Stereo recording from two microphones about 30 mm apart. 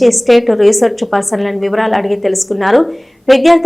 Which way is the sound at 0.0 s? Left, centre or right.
Centre.